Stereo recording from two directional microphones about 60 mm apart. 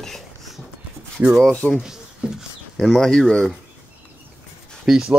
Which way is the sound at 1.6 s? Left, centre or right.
Left.